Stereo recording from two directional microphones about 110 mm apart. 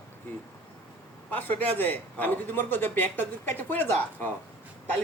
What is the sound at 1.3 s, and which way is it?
Speech, 15° left (ahead or behind).